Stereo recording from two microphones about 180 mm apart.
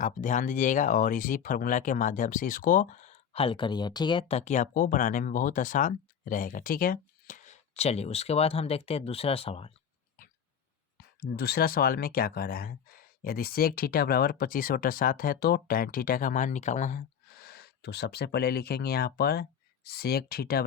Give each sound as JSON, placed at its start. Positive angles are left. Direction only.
{"t": 0.0, "sound": "speech", "side_deg": 45}
{"t": 10.9, "sound": "speech", "side_deg": 60}